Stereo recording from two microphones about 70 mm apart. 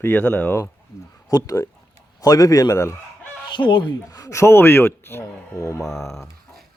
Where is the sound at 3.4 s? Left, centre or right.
Left.